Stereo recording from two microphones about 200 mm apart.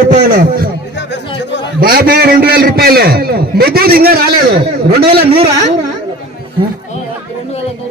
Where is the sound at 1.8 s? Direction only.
50° right (ahead or behind).